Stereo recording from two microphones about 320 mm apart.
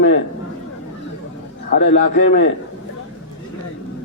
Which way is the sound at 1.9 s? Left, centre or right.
Left.